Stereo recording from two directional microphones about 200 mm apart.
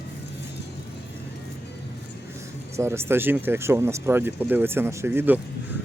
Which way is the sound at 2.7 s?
15° right (ahead or behind).